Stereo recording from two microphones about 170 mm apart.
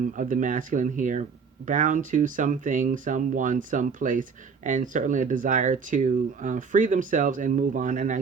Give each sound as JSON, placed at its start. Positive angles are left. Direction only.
{"t": 0.2, "sound": "speech", "side_deg": -50}